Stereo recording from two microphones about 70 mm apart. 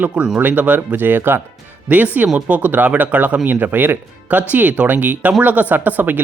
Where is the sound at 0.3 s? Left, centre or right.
Right.